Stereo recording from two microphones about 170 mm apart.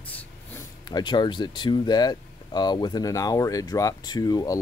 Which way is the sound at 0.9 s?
25° left (ahead or behind).